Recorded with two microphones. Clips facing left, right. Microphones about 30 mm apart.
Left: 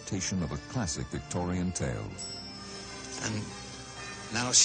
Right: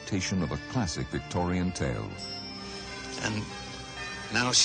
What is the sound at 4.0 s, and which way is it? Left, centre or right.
Music, right.